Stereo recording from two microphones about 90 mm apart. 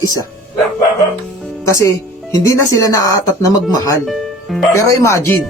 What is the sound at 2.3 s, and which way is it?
Speech, 35° left (ahead or behind).